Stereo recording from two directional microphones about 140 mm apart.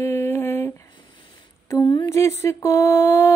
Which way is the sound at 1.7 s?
30° left (ahead or behind).